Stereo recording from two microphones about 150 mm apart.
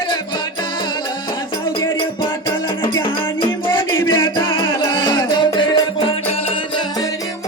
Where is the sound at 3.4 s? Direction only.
25° left (ahead or behind).